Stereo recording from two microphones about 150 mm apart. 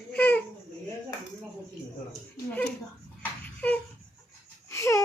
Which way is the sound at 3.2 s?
10° left (ahead or behind).